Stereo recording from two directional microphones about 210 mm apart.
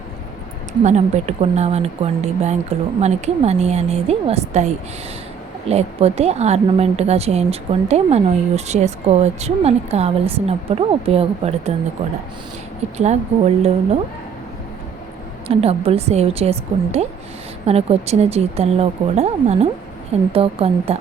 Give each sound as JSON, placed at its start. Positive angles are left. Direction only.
{"t": 0.9, "sound": "a woman's voice", "side_deg": -30}
{"t": 13.0, "sound": "speech", "side_deg": -30}
{"t": 15.4, "sound": "a woman's voice", "side_deg": -30}